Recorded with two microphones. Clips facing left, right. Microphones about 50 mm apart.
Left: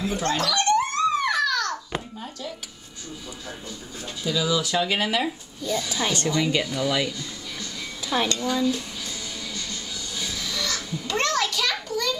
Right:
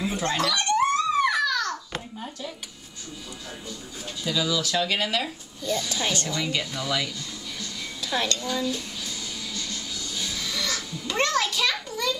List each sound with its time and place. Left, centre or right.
0.0 s giggle: centre
2.1 s a sound: centre
4.2 s speech: centre
5.6 s speech: centre
8.5 s music: centre
10.6 s music: centre